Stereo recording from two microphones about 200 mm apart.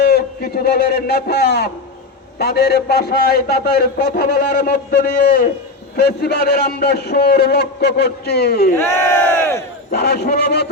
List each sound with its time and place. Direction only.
0.0 s a man's voice: 50° left (ahead or behind)
6.0 s a man's voice: 50° left (ahead or behind)
8.8 s crowd: 10° left (ahead or behind)
9.9 s a man's voice: 55° left (ahead or behind)